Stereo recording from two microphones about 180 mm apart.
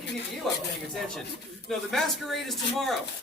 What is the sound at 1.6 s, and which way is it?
A woman's voice, centre (ahead or behind).